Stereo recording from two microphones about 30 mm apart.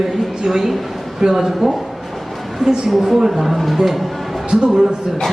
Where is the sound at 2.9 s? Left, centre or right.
Centre.